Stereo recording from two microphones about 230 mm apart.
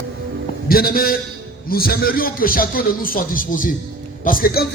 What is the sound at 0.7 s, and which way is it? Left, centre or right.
A man's voice, left.